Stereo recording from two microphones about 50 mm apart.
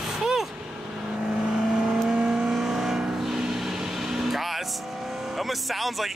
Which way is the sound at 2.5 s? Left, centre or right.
Centre.